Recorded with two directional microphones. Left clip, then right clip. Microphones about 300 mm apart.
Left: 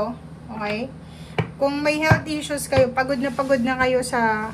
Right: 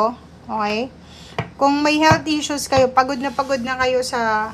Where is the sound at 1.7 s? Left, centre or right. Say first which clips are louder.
Right 6 dB; centre.